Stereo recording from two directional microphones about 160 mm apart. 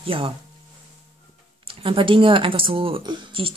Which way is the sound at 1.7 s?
35° right (ahead or behind).